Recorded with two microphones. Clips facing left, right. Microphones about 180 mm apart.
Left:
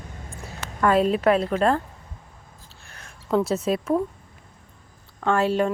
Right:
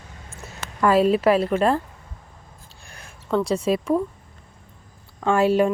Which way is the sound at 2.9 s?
10° right (ahead or behind).